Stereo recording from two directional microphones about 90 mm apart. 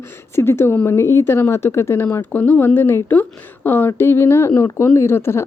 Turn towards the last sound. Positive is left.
turn(degrees=30)  # may be behind; listen again after turning